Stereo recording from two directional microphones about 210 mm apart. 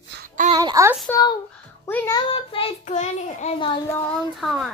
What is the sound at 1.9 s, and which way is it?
Speech, 10° left (ahead or behind).